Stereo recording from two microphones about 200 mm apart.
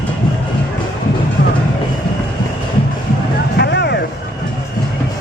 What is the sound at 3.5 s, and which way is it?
Vehicle, 55° left (ahead or behind).